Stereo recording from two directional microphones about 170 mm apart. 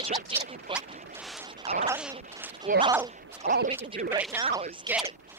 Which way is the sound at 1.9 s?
10° right (ahead or behind).